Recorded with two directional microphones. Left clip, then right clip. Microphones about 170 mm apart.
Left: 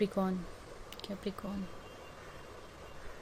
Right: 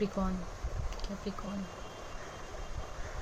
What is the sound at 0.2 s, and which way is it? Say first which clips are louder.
Speech: left 2 dB; 45° left (ahead or behind).